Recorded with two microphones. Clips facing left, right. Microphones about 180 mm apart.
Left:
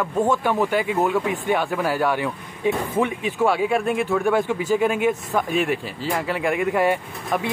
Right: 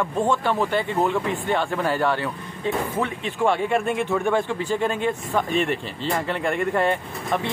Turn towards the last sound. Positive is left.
turn(degrees=10)  # may be behind; listen again after turning